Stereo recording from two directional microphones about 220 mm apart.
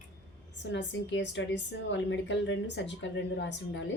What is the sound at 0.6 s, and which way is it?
A woman's voice, 55° left (ahead or behind).